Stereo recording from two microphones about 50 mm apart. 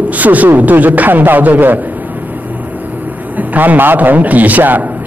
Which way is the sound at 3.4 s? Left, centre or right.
Right.